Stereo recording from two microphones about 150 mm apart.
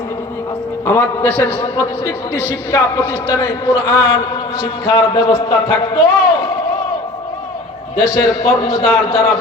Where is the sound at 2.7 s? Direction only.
20° left (ahead or behind).